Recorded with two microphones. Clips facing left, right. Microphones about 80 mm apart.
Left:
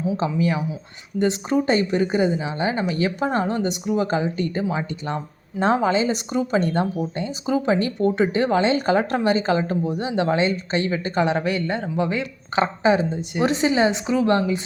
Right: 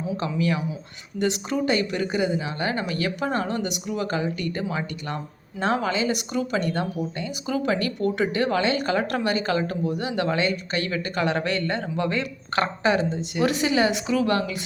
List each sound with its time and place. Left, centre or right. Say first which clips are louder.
0.2 s speech: left 3 dB; left
11.3 s speech: left 2 dB; centre